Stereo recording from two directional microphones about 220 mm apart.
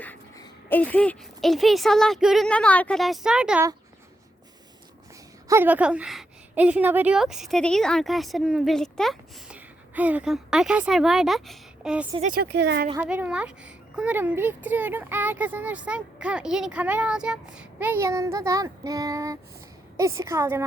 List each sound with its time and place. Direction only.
0.0 s speech: 10° left (ahead or behind)
5.5 s a woman's voice: 10° right (ahead or behind)
12.3 s speech: 45° right (ahead or behind)
13.0 s speech: 5° right (ahead or behind)